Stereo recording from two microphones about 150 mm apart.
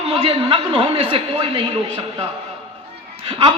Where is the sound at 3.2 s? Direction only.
35° right (ahead or behind).